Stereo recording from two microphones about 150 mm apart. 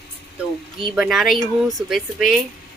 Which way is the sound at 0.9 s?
5° right (ahead or behind).